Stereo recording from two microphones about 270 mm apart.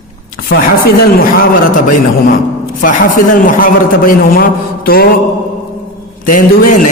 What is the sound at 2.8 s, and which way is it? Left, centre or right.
A man's voice, left.